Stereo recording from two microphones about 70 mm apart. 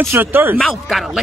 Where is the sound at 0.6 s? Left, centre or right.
Centre.